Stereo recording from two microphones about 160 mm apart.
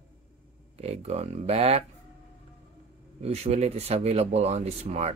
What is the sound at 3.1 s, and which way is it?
Speech, 40° right (ahead or behind).